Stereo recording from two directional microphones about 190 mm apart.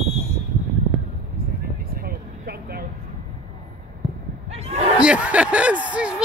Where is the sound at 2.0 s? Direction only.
55° right (ahead or behind).